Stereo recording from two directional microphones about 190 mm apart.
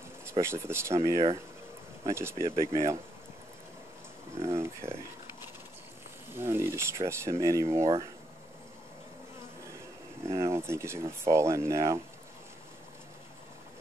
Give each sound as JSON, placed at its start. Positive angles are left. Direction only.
{"t": 0.2, "sound": "speech", "side_deg": -15}
{"t": 4.4, "sound": "speech", "side_deg": -15}
{"t": 6.3, "sound": "speech", "side_deg": -10}
{"t": 10.2, "sound": "speech", "side_deg": -15}